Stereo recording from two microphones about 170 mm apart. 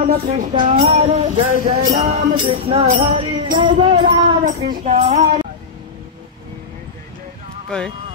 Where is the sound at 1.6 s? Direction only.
40° right (ahead or behind).